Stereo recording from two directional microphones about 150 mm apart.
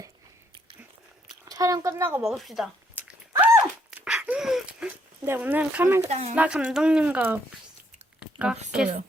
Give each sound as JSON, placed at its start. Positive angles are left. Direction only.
{"t": 1.3, "sound": "a sound", "side_deg": -25}
{"t": 2.2, "sound": "speech", "side_deg": 0}
{"t": 2.9, "sound": "dog", "side_deg": -10}
{"t": 5.2, "sound": "speech", "side_deg": -15}
{"t": 6.0, "sound": "speech", "side_deg": -50}
{"t": 6.3, "sound": "speech", "side_deg": -10}
{"t": 8.2, "sound": "a sound", "side_deg": -5}
{"t": 8.7, "sound": "speech", "side_deg": -5}